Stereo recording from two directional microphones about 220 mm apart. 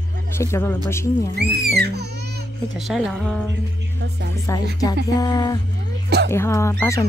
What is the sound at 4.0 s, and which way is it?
Speech, 50° right (ahead or behind).